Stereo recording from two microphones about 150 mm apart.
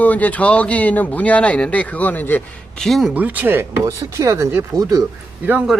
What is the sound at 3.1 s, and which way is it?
Speech, 10° right (ahead or behind).